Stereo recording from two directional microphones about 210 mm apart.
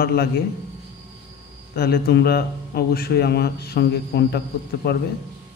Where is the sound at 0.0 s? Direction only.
50° left (ahead or behind).